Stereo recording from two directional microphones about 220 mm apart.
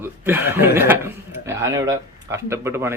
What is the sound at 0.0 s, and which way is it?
Speech, 10° right (ahead or behind).